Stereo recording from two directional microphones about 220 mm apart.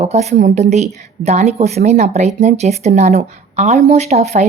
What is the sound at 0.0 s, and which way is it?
A woman's voice, 30° right (ahead or behind).